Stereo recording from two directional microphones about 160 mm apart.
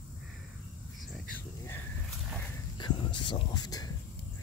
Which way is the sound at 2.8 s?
30° left (ahead or behind).